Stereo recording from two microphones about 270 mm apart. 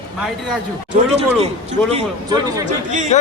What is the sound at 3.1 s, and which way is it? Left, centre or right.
Speech, left.